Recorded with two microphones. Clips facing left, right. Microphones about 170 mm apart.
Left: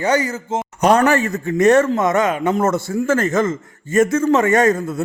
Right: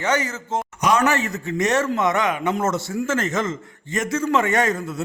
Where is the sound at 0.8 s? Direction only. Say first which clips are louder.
Left 6 dB; 55° left (ahead or behind).